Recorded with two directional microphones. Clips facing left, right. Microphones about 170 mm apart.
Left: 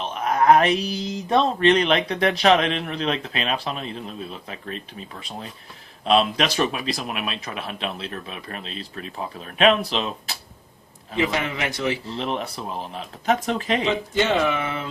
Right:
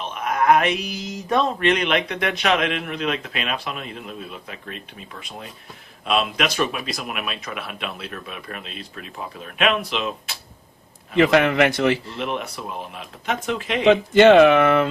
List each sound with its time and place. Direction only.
0.0 s speech: 35° left (ahead or behind)
6.1 s speech: 35° left (ahead or behind)
11.2 s speech: 70° right (ahead or behind)
12.1 s speech: 35° left (ahead or behind)
13.8 s speech: 75° right (ahead or behind)